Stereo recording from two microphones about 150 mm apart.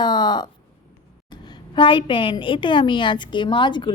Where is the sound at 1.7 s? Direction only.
35° left (ahead or behind).